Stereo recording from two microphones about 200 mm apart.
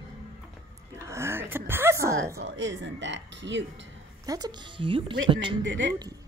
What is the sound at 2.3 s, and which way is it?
Speech, 65° right (ahead or behind).